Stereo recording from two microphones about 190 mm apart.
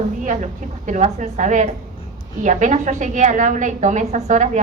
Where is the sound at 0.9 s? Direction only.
40° right (ahead or behind).